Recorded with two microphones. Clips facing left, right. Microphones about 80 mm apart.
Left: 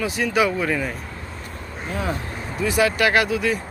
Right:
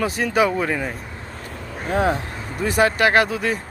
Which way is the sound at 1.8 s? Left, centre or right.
Right.